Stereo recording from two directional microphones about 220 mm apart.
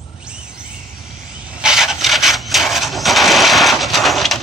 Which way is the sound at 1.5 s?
5° right (ahead or behind).